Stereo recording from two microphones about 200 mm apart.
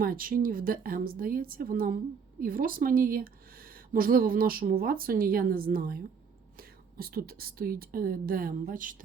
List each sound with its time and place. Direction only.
0.0 s speech: 45° right (ahead or behind)